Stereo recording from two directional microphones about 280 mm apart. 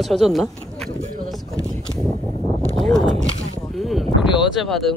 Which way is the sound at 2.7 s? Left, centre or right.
Centre.